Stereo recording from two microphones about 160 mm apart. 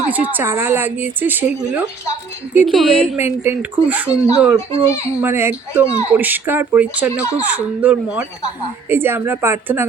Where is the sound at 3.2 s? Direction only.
15° right (ahead or behind).